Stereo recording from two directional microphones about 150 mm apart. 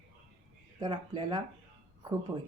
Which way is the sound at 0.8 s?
25° right (ahead or behind).